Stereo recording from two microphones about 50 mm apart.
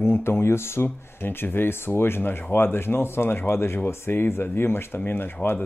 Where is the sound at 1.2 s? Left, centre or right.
Left.